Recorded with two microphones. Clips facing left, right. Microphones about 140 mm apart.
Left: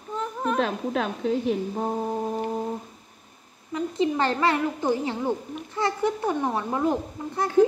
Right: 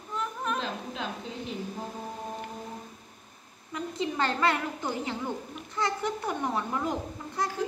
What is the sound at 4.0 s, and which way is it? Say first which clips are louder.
A child's voice: left 4 dB; 30° left (ahead or behind).